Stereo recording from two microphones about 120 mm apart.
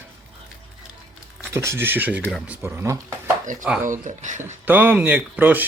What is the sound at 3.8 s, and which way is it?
Speech, 90° right.